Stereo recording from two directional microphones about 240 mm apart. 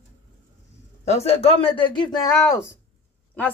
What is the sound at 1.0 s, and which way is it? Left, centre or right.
A man's voice, left.